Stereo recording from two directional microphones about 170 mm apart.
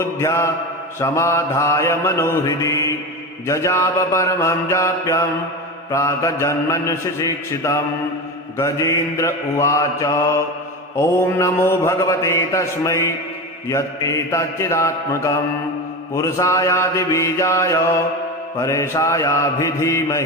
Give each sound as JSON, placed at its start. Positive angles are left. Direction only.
{"t": 0.0, "sound": "mantra", "side_deg": 15}